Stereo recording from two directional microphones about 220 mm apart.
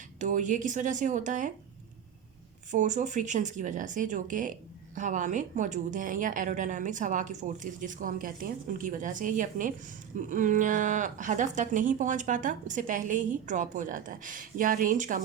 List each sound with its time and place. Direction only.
0.2 s speech: 35° right (ahead or behind)
2.7 s speech: 35° right (ahead or behind)